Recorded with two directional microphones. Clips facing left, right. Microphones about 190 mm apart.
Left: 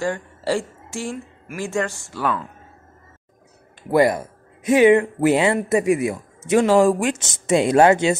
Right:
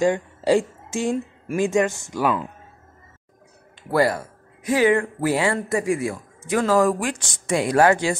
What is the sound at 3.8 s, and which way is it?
Speech, 20° left (ahead or behind).